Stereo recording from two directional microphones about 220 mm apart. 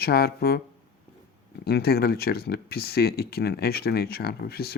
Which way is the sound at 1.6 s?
45° left (ahead or behind).